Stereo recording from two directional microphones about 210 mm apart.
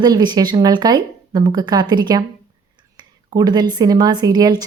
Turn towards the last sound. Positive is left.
turn(degrees=-20)  # may be behind; listen again after turning